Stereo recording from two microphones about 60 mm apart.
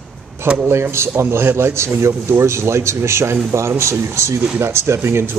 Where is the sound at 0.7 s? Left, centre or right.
Right.